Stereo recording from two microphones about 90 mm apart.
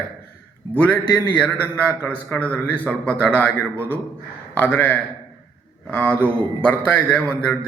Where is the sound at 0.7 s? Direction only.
15° left (ahead or behind).